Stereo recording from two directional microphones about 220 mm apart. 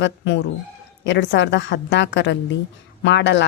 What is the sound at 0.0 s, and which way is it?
A woman's voice, 55° left (ahead or behind).